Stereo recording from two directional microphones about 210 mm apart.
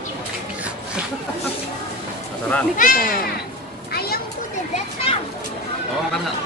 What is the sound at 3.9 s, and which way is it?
Children playing, 45° left (ahead or behind).